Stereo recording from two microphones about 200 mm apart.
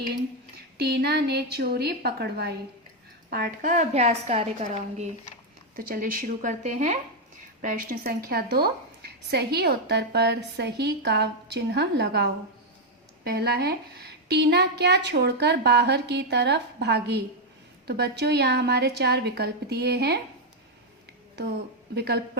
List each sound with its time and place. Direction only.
0.8 s a woman's voice: 55° right (ahead or behind); by 5.0 s 35° right (ahead or behind)
5.7 s a woman's voice: 45° right (ahead or behind)
21.9 s a woman's voice: 55° right (ahead or behind)